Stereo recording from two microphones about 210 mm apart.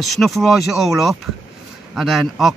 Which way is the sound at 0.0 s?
Centre (ahead or behind).